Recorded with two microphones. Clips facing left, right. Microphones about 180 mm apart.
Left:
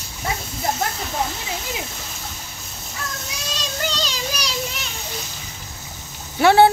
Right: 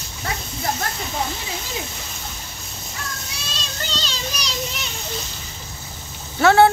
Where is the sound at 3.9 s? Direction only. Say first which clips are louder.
Left 2 dB; 10° left (ahead or behind).